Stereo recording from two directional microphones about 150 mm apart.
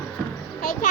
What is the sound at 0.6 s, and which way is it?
Music, 75° left (ahead or behind).